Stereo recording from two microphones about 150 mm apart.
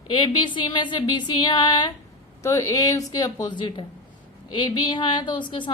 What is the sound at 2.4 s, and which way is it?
A woman's voice, 20° left (ahead or behind).